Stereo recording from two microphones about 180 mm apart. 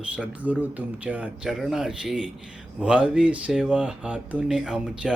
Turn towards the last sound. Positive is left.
turn(degrees=-5)  # may be behind; listen again after turning